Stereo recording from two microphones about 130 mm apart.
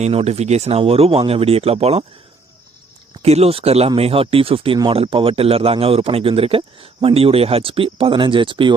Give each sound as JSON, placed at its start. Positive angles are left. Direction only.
{"t": 0.0, "sound": "speech", "side_deg": -50}
{"t": 3.2, "sound": "speech", "side_deg": -55}